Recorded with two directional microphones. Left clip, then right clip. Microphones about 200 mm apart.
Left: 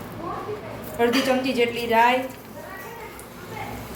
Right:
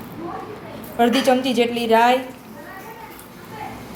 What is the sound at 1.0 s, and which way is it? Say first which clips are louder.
A woman's voice: right 4 dB; 40° right (ahead or behind).